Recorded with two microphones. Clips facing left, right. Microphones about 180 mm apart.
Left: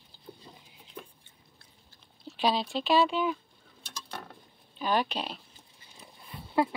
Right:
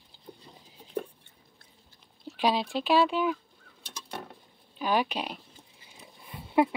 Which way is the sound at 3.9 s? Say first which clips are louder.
Right 2 dB; 20° right (ahead or behind).